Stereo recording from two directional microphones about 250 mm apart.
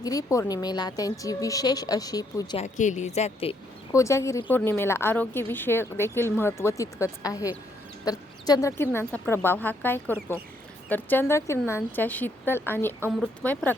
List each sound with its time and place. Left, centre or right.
0.0 s a woman's voice: centre
2.6 s speech: left
3.9 s a woman's voice: centre
13.0 s speech: centre